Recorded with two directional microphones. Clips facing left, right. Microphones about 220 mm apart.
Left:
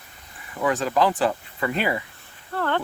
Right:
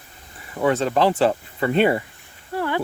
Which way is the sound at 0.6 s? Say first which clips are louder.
Right 3 dB; 30° right (ahead or behind).